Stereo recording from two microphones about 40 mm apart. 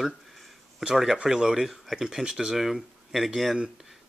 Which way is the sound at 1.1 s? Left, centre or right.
Centre.